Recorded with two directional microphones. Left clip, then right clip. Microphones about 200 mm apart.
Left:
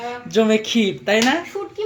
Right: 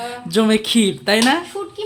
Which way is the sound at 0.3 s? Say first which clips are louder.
Right 1 dB; 20° right (ahead or behind).